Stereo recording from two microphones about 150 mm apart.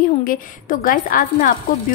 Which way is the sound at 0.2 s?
70° left (ahead or behind).